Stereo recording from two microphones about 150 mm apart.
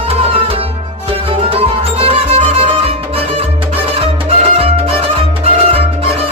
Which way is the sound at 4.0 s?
40° right (ahead or behind).